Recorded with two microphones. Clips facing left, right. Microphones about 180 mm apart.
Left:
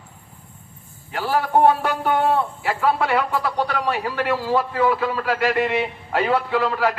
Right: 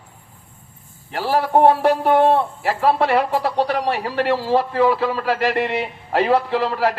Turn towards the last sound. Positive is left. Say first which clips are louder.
# right 1 dB
turn(degrees=-35)  # may be behind; listen again after turning